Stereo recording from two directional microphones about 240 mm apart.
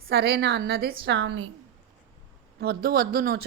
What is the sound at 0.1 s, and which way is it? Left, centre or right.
A woman's voice, right.